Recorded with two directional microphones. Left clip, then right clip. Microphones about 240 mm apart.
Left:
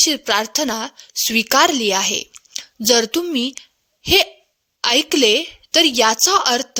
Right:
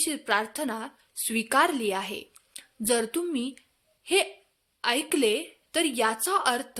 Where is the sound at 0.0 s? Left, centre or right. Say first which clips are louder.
Left 10 dB; left.